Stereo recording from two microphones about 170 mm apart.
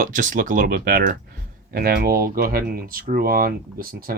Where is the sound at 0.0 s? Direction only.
50° right (ahead or behind).